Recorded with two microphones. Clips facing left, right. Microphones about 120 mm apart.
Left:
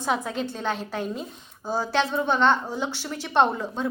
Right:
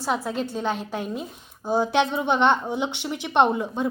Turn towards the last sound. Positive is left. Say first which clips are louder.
# right 2 dB
turn(degrees=-15)  # may be behind; listen again after turning